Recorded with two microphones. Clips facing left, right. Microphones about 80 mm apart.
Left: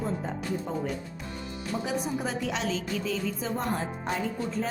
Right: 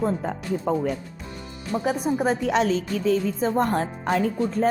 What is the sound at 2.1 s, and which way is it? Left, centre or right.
A woman's voice, right.